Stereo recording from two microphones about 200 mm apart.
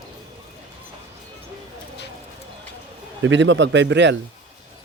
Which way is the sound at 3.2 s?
65° right (ahead or behind).